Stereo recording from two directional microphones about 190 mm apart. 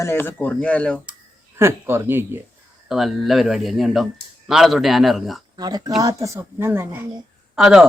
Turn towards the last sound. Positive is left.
turn(degrees=0)  # may be behind; listen again after turning